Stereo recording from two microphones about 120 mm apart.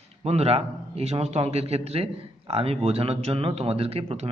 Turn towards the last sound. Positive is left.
turn(degrees=-55)  # may be behind; listen again after turning